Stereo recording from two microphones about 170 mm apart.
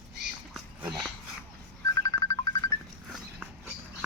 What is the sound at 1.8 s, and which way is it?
Music, 20° left (ahead or behind).